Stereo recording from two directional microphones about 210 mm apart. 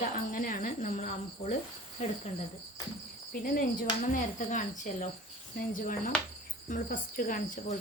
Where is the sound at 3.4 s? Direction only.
40° left (ahead or behind).